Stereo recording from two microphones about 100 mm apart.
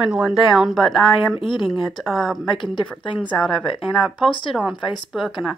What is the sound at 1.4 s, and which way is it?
Speech, 55° left (ahead or behind).